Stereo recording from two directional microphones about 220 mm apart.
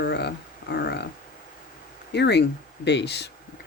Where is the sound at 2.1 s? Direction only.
50° left (ahead or behind).